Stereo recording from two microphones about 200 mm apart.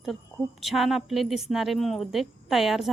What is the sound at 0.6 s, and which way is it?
A woman's voice, centre (ahead or behind).